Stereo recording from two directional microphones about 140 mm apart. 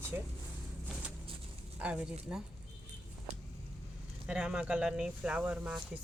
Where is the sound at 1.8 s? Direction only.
5° right (ahead or behind).